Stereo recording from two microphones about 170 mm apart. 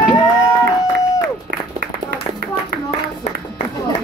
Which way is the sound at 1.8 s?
70° right (ahead or behind).